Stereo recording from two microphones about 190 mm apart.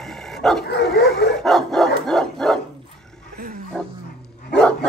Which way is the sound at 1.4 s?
Centre (ahead or behind).